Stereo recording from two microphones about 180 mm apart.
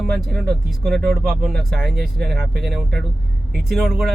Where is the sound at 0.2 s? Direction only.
Centre (ahead or behind).